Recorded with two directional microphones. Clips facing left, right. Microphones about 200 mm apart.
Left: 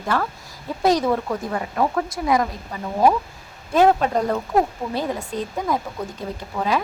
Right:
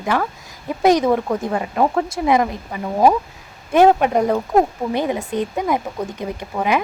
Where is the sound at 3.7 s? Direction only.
20° right (ahead or behind).